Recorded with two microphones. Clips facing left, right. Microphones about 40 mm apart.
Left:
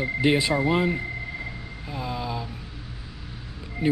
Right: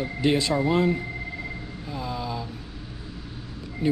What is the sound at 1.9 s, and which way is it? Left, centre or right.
Vehicle, centre.